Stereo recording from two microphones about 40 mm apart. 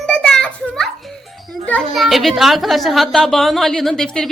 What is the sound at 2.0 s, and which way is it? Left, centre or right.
A woman's voice, centre.